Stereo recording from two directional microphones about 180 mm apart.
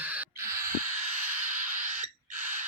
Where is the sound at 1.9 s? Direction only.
45° right (ahead or behind).